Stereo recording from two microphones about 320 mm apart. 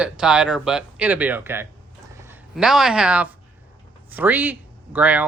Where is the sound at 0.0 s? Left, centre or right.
Centre.